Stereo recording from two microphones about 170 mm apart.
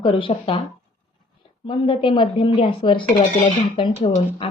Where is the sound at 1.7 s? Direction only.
30° left (ahead or behind).